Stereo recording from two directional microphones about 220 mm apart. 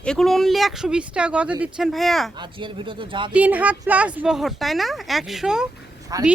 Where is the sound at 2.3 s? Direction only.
20° right (ahead or behind).